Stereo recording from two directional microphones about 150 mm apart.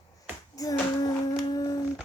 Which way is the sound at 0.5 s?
25° left (ahead or behind).